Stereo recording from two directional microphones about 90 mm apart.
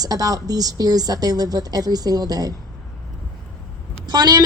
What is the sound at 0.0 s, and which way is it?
A woman's voice, 45° right (ahead or behind).